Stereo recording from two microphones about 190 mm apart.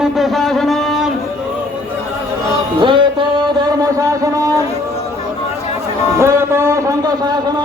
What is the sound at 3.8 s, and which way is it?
Speech, 20° right (ahead or behind).